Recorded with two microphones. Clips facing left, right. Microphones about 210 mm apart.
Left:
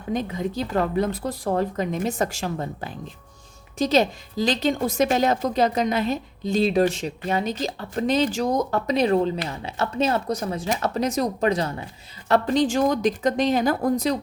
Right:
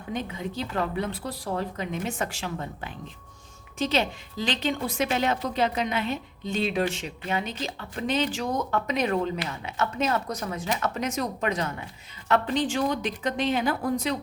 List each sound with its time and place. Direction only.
0.1 s a woman's voice: 40° left (ahead or behind)